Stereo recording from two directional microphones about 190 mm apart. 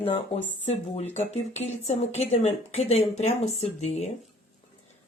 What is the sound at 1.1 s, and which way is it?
Speech, 35° left (ahead or behind).